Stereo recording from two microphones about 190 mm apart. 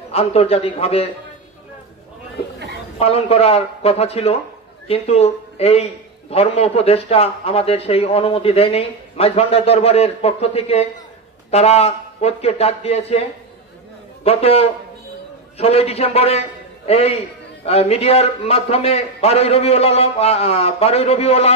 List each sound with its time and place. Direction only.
0.1 s a man's voice: 30° left (ahead or behind)
3.0 s a man's voice: 30° left (ahead or behind)
14.2 s a man's voice: 30° left (ahead or behind)